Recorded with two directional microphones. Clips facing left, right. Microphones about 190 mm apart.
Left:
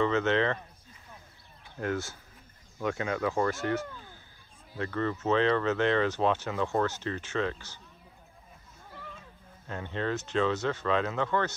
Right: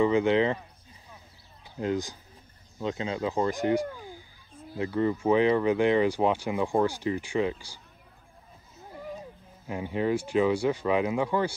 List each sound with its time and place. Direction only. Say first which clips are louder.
0.0 s speech: right 4 dB; 15° right (ahead or behind)
1.8 s speech: right 3 dB; 15° right (ahead or behind)
9.7 s speech: right 5 dB; 10° right (ahead or behind)